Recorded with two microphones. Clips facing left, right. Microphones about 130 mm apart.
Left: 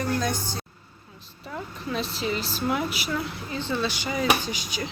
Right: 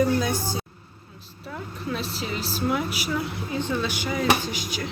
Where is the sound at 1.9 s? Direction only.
5° right (ahead or behind).